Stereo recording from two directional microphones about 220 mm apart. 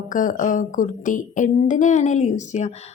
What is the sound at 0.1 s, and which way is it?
A woman's voice, 35° left (ahead or behind).